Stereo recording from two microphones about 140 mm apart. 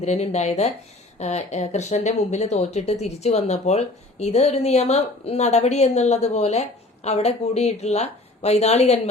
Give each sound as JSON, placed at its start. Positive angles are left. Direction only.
{"t": 0.0, "sound": "speech", "side_deg": 50}